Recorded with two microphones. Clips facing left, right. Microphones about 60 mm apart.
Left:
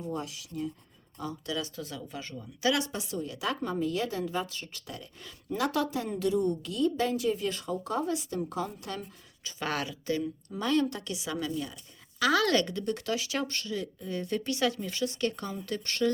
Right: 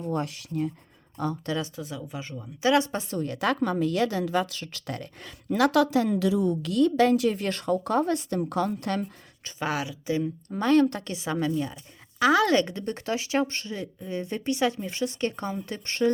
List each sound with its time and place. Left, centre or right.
0.0 s speech: right
1.7 s speech: centre; by 3.2 s right
3.2 s speech: right
9.6 s speech: centre
10.5 s speech: right
12.2 s speech: right